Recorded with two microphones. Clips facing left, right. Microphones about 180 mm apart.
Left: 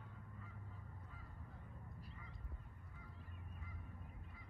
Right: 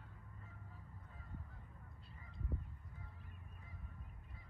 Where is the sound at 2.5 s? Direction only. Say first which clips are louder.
Right 12 dB; 30° right (ahead or behind).